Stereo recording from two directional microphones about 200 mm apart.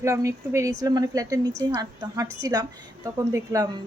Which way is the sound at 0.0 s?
15° right (ahead or behind).